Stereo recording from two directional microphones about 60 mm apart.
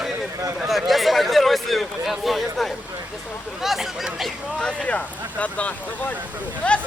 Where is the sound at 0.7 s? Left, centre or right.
Centre.